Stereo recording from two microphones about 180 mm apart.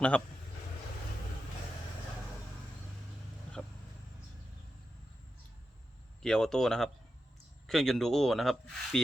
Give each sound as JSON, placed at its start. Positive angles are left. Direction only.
{"t": 3.6, "sound": "vehicle", "side_deg": 10}
{"t": 6.2, "sound": "speech", "side_deg": 5}